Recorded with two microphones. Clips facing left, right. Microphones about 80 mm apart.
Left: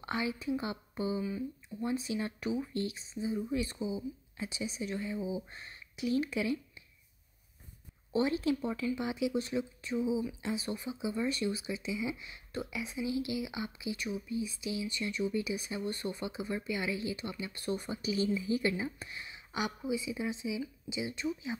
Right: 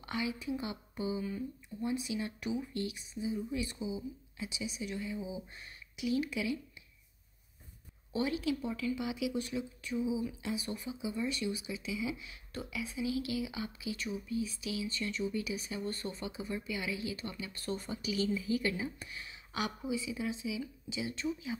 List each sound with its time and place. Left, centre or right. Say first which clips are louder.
0.0 s speech: left 2 dB; left
8.1 s speech: left 3 dB; left
17.2 s speech: left 2 dB; centre